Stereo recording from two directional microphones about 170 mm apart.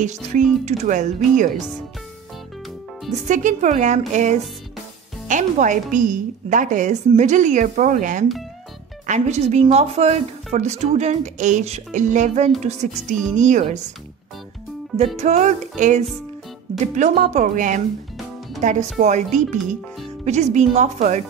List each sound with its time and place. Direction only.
0.0 s a woman's voice: 45° right (ahead or behind)
3.3 s a woman's voice: 45° right (ahead or behind)
15.1 s a woman's voice: 45° right (ahead or behind)